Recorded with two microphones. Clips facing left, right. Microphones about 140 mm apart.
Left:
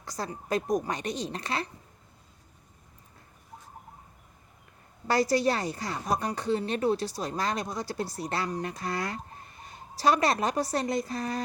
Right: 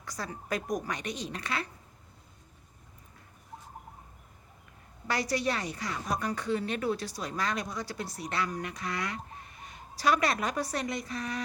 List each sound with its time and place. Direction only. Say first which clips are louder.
0.0 s a woman's voice: left 3 dB; 30° left (ahead or behind)
5.0 s a woman's voice: left 6 dB; 35° left (ahead or behind)